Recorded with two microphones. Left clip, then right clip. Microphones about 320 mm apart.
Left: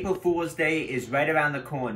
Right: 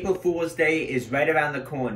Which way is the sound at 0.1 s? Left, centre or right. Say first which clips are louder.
Right 2 dB; centre.